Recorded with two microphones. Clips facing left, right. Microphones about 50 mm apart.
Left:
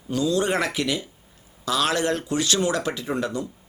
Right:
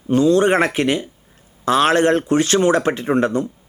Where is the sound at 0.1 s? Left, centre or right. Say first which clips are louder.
Right 8 dB; right.